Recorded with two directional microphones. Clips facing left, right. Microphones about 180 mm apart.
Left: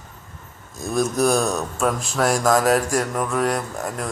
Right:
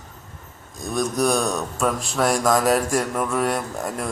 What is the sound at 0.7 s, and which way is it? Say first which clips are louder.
Speech: left 2 dB; 5° left (ahead or behind).